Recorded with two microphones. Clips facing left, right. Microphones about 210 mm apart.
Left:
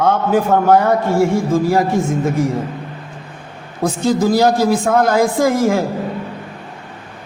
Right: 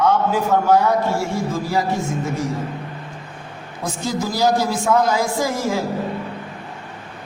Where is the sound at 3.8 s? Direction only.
60° left (ahead or behind).